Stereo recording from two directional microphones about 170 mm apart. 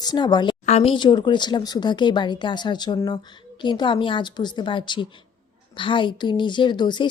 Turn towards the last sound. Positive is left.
turn(degrees=25)  # may be behind; listen again after turning